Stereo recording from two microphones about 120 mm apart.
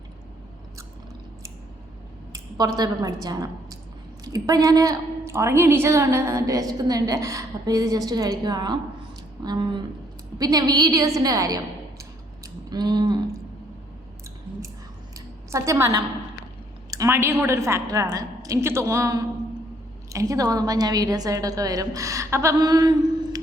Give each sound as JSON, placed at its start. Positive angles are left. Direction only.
{"t": 2.3, "sound": "a woman's voice", "side_deg": -35}
{"t": 15.5, "sound": "a woman's voice", "side_deg": -25}